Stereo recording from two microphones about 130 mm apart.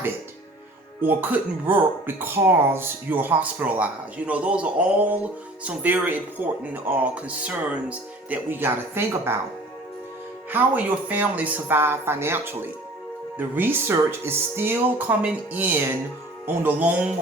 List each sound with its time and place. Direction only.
1.0 s speech: 15° right (ahead or behind)
10.5 s speech: 15° right (ahead or behind)